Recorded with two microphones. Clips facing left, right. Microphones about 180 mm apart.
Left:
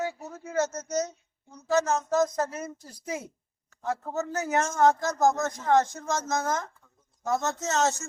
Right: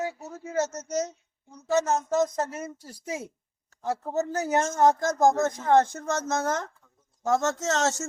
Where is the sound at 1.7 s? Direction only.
25° right (ahead or behind).